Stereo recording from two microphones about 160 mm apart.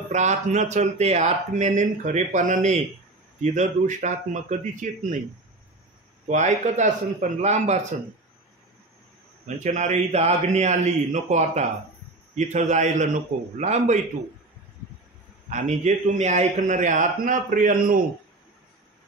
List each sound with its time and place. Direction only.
0.1 s speech: 45° right (ahead or behind)
6.2 s speech: 45° right (ahead or behind)
9.6 s speech: 50° right (ahead or behind)
15.5 s speech: 45° right (ahead or behind)